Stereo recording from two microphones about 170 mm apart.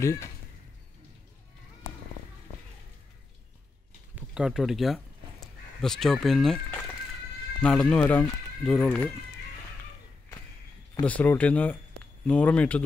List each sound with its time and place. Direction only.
0.0 s speech: 15° left (ahead or behind)
4.1 s a sound: 5° right (ahead or behind)
7.6 s speech: 5° left (ahead or behind)
11.1 s speech: 10° left (ahead or behind)